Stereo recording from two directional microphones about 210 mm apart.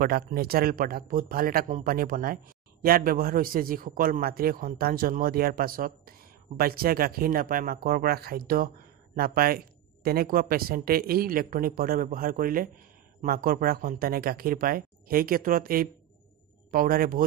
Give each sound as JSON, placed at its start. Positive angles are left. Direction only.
{"t": 0.0, "sound": "speech", "side_deg": -45}